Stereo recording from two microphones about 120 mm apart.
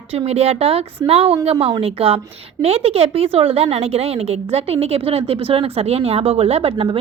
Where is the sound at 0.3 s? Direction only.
60° right (ahead or behind).